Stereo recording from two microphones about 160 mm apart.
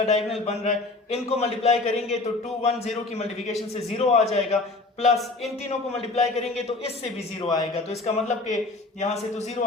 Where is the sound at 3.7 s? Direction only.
40° left (ahead or behind).